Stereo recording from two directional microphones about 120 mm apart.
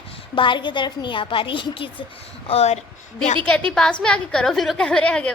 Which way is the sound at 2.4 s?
60° left (ahead or behind).